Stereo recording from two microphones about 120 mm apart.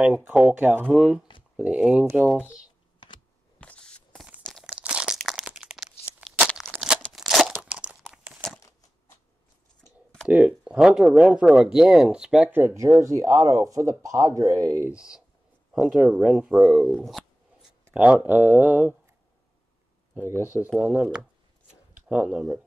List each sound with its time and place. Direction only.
0.0 s speech: 10° right (ahead or behind)
3.5 s a sound: 10° left (ahead or behind)
4.5 s crunch: 5° left (ahead or behind)
4.7 s crunch: 10° right (ahead or behind)
6.4 s a sound: 5° right (ahead or behind)
6.8 s crunch: 5° right (ahead or behind)
8.1 s crumpling: 10° right (ahead or behind)
10.2 s speech: 10° right (ahead or behind)
14.9 s speech: 5° right (ahead or behind)
16.9 s shuffling cards: centre (ahead or behind)
17.9 s speech: 10° right (ahead or behind)
20.2 s speech: 20° right (ahead or behind)
20.8 s speech: 10° right (ahead or behind)